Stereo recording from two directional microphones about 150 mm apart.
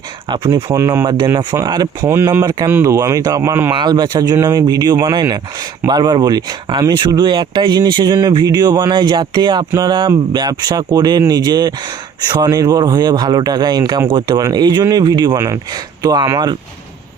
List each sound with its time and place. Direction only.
0.3 s speech: 30° right (ahead or behind)
0.8 s speech: 20° right (ahead or behind)
2.0 s speech: 15° right (ahead or behind)
2.3 s speech: 25° right (ahead or behind)
3.7 s speech: 30° right (ahead or behind)